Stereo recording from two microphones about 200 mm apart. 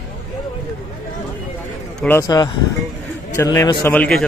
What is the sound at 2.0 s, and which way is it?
A man's voice, 10° left (ahead or behind).